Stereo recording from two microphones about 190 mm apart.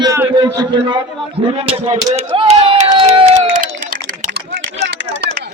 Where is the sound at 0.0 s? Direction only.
15° right (ahead or behind).